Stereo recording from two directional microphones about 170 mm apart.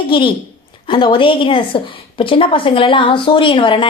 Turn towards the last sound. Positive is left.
turn(degrees=30)  # may be behind; listen again after turning